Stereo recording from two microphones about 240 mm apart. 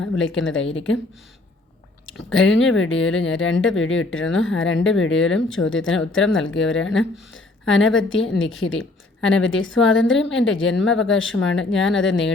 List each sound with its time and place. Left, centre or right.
0.0 s speech: left
2.0 s speech: left